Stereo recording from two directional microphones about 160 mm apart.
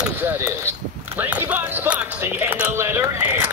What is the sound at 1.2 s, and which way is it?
Music, 10° right (ahead or behind).